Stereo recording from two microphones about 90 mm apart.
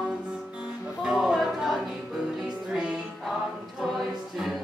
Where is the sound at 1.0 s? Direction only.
5° right (ahead or behind).